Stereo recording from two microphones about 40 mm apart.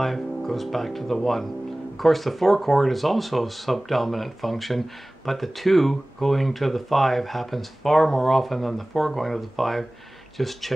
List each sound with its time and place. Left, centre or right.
0.0 s speech: centre